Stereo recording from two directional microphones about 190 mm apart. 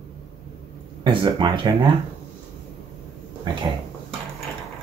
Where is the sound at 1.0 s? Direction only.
25° right (ahead or behind).